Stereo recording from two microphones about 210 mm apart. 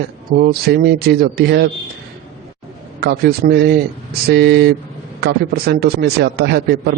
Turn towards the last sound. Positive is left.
turn(degrees=-55)  # may be behind; listen again after turning